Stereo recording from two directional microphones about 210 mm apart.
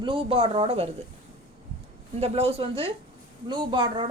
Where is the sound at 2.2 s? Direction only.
30° right (ahead or behind).